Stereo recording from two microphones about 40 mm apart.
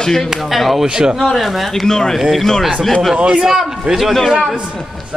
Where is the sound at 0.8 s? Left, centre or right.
Centre.